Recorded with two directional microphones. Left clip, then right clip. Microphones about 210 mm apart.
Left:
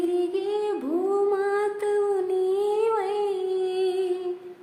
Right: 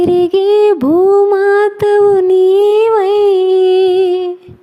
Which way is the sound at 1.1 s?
50° right (ahead or behind).